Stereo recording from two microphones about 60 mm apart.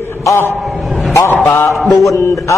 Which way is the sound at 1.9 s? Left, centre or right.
Left.